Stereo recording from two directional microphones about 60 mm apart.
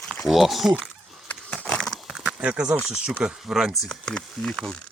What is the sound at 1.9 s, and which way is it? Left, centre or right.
Horse, centre.